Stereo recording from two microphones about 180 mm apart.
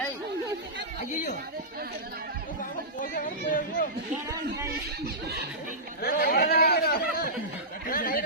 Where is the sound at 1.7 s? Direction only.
55° right (ahead or behind).